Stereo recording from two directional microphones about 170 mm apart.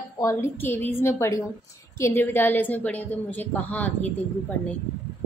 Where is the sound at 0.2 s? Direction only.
15° left (ahead or behind).